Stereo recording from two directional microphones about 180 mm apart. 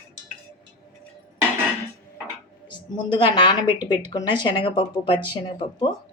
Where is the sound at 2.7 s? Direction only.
25° left (ahead or behind).